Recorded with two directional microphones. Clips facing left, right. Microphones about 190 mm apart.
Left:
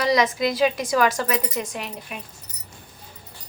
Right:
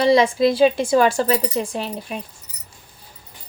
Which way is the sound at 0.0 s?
30° right (ahead or behind).